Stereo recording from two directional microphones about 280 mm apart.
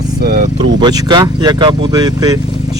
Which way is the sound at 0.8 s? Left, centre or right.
Centre.